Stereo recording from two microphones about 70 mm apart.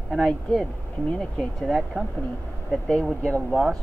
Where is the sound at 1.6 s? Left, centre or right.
Centre.